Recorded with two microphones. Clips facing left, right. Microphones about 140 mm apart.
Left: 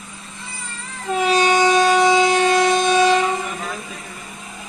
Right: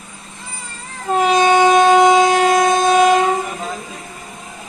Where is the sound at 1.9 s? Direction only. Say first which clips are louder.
Right 4 dB; 45° right (ahead or behind).